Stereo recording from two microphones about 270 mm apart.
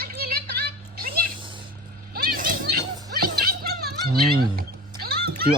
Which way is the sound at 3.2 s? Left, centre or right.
Right.